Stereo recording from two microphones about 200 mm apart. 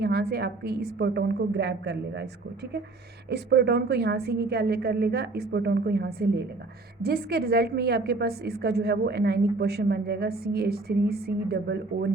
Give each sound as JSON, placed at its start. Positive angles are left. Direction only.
{"t": 0.0, "sound": "a woman's voice", "side_deg": -50}
{"t": 3.2, "sound": "a woman's voice", "side_deg": -55}